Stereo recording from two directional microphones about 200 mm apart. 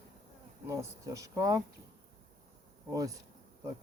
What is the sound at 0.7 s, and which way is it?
Speech, 15° right (ahead or behind).